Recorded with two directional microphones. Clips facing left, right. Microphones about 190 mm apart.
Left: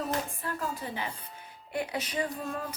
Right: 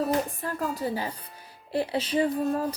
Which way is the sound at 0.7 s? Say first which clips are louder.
Right 6 dB; 40° right (ahead or behind).